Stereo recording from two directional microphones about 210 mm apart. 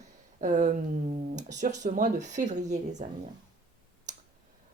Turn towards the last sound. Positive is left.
turn(degrees=-35)  # may be behind; listen again after turning